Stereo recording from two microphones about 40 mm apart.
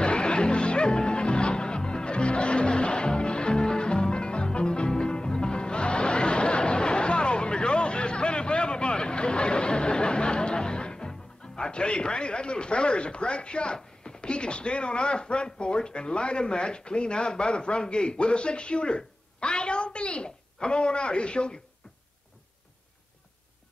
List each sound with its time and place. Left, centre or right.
0.0 s music: left